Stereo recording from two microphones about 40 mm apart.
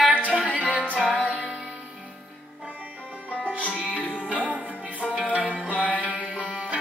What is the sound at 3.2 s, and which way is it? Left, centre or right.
Music, left.